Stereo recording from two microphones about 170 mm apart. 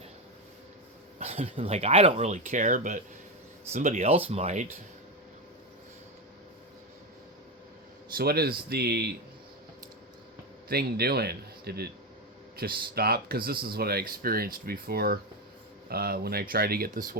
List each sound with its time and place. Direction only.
1.2 s speech: 35° right (ahead or behind)
8.1 s speech: 65° right (ahead or behind)
10.7 s a man's voice: 65° right (ahead or behind)